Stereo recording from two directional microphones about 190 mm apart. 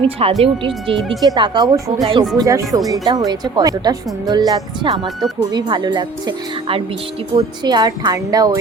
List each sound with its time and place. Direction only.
0.2 s speech: 30° right (ahead or behind)